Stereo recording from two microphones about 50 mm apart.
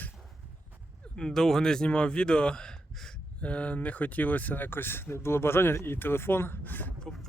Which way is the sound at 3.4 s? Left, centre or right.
Left.